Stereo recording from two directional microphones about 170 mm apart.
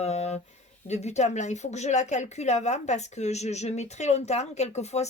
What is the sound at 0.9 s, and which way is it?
Speech, 40° left (ahead or behind).